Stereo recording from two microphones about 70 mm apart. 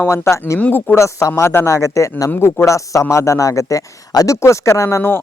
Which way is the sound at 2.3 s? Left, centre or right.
Left.